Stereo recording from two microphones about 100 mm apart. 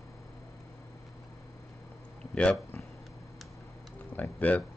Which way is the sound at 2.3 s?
10° left (ahead or behind).